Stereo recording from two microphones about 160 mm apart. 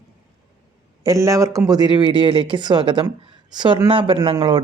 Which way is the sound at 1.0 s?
20° right (ahead or behind).